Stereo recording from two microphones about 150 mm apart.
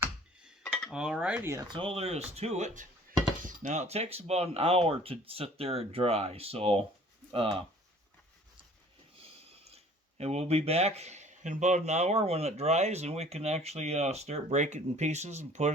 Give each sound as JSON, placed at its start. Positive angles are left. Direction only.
{"t": 0.4, "sound": "dishes", "side_deg": 5}
{"t": 0.9, "sound": "cutlery", "side_deg": -5}
{"t": 1.7, "sound": "speech", "side_deg": -40}
{"t": 9.7, "sound": "speech", "side_deg": -45}